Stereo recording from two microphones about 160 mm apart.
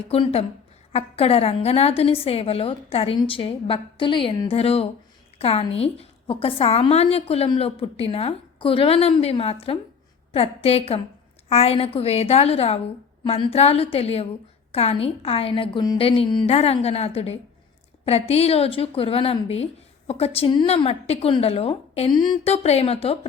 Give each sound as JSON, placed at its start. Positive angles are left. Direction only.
{"t": 0.1, "sound": "a woman's voice", "side_deg": 40}
{"t": 22.4, "sound": "a woman's voice", "side_deg": 40}